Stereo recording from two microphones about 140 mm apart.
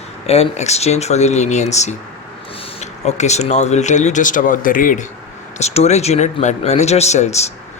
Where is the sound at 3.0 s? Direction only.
55° left (ahead or behind); by 5.0 s 75° left (ahead or behind).